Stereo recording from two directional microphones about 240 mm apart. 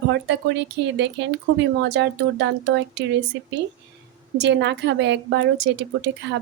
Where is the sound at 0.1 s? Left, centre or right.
Right.